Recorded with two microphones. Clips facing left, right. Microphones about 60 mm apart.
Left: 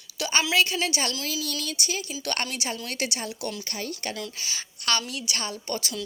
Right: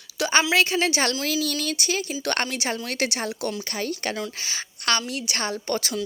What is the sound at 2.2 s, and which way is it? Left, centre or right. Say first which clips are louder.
A woman's voice: right 3 dB; right.